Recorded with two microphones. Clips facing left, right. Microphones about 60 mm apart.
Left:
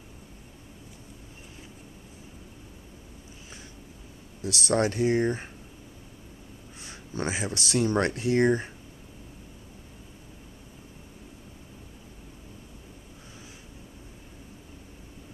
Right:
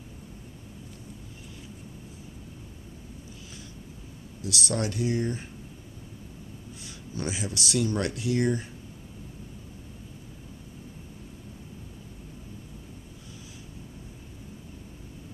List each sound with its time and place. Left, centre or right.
4.4 s speech: left
7.2 s speech: left